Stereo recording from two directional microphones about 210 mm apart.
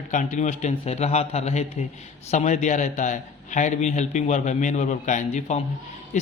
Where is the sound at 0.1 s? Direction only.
35° left (ahead or behind).